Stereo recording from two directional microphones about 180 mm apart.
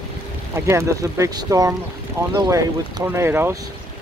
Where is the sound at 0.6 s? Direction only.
15° right (ahead or behind).